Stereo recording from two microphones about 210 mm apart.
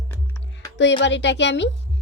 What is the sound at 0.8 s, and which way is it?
Speech, 55° left (ahead or behind).